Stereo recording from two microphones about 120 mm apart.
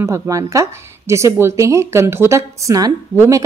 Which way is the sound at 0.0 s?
25° right (ahead or behind).